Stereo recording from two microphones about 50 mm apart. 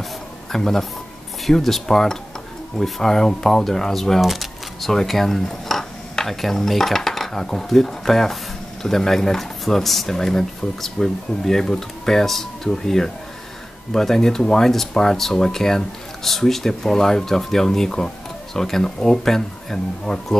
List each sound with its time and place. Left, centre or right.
0.5 s speech: centre